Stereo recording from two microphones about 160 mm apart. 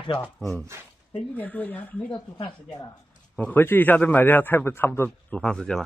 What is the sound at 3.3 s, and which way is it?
A man's voice, 10° left (ahead or behind).